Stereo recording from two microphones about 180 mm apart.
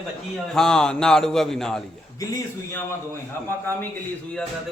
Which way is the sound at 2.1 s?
20° left (ahead or behind).